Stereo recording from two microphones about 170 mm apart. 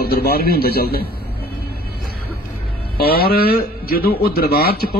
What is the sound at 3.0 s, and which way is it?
A man's voice, 65° left (ahead or behind).